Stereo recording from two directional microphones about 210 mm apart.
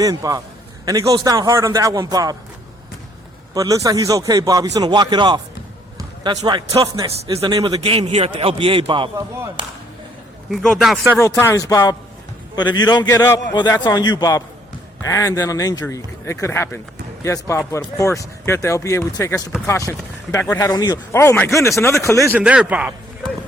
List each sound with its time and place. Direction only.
0.0 s a man's voice: 15° right (ahead or behind)
3.5 s a man's voice: 15° right (ahead or behind)
10.5 s a man's voice: centre (ahead or behind)
11.2 s a man's voice: 10° left (ahead or behind)
22.3 s a man's voice: 5° right (ahead or behind)